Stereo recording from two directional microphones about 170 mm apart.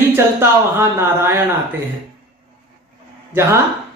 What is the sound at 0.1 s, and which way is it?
Speech, 15° right (ahead or behind).